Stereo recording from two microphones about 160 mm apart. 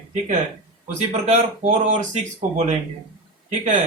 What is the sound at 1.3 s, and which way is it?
Speech, 45° right (ahead or behind).